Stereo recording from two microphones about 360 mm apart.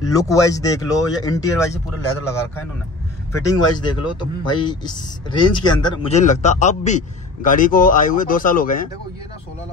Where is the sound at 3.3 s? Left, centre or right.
Centre.